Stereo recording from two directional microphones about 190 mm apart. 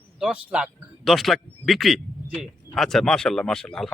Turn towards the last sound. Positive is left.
turn(degrees=5)  # may be behind; listen again after turning